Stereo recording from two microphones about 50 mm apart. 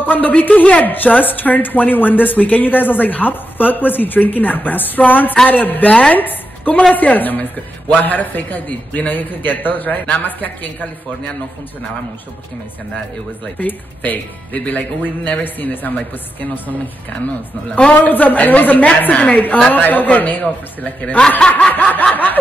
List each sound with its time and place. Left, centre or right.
0.0 s speech: left
13.6 s speech: left
21.4 s snicker: left
22.1 s speech: left